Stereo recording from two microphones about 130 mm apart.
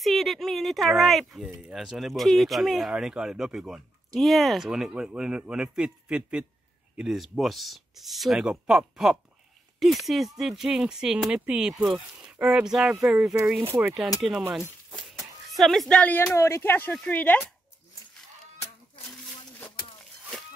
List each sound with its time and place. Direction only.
0.0 s speech: centre (ahead or behind)
14.9 s a sound: centre (ahead or behind)
15.5 s speech: centre (ahead or behind)
16.3 s speech: 20° left (ahead or behind)